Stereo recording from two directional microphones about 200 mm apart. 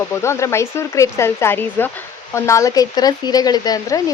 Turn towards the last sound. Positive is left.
turn(degrees=20)  # may be behind; listen again after turning